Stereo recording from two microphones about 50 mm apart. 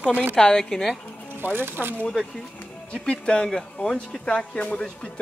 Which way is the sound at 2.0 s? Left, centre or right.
Centre.